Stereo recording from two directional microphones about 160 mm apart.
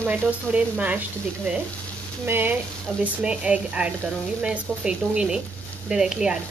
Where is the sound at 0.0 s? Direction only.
10° right (ahead or behind).